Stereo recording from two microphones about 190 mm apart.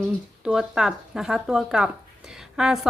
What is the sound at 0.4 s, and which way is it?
Speech, 5° right (ahead or behind).